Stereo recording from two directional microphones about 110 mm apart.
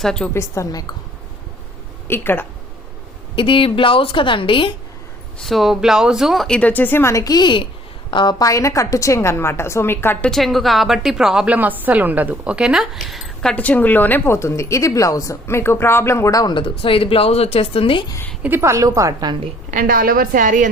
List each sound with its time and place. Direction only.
0.0 s speech: 5° left (ahead or behind)
0.3 s a woman's voice: 25° left (ahead or behind)
2.0 s a woman's voice: 20° left (ahead or behind)
3.3 s a woman's voice: 50° left (ahead or behind)
5.4 s speech: centre (ahead or behind)
6.6 s a woman's voice: 15° left (ahead or behind); by 8.4 s 45° left (ahead or behind)
8.4 s a woman's voice: 30° left (ahead or behind)
10.2 s a woman's voice: centre (ahead or behind); by 18.0 s 60° left (ahead or behind)
18.4 s a woman's voice: 20° right (ahead or behind)